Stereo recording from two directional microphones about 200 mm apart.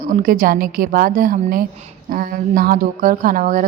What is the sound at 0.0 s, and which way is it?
A woman's voice, 45° right (ahead or behind).